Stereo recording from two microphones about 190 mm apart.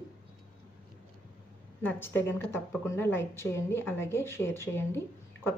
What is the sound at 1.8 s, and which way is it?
A woman's voice, 10° left (ahead or behind).